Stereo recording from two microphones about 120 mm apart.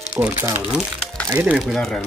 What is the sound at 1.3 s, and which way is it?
Speech, 10° right (ahead or behind).